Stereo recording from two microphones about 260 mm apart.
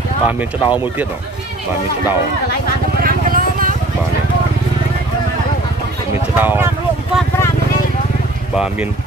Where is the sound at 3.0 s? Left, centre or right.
Right.